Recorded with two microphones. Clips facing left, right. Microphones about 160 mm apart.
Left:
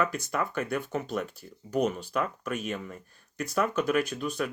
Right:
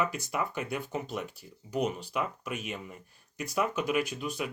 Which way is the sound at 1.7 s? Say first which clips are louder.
Left 3 dB; 45° left (ahead or behind).